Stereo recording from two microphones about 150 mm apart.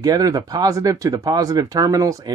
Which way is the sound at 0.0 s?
25° right (ahead or behind).